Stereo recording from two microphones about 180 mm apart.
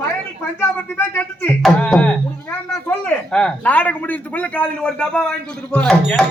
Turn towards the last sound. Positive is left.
turn(degrees=5)  # may be behind; listen again after turning